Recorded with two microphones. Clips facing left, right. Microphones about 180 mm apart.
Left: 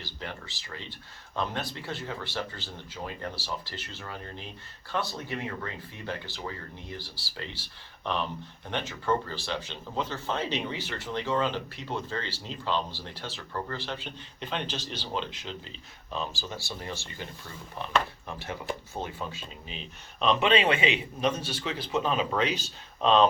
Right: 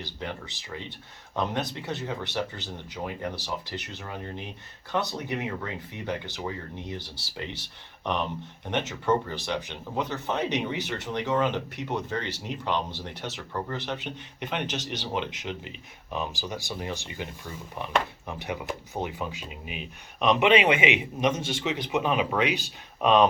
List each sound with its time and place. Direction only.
0.0 s speech: 20° right (ahead or behind)